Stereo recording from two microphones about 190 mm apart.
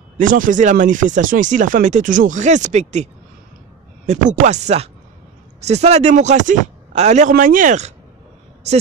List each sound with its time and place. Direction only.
0.2 s speech: 45° right (ahead or behind)